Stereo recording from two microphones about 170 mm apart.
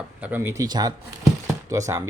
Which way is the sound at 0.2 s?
10° right (ahead or behind).